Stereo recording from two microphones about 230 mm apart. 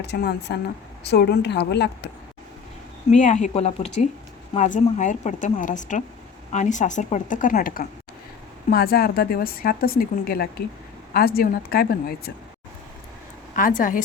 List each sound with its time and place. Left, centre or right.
0.0 s a woman's voice: left
3.1 s speech: left
13.6 s speech: left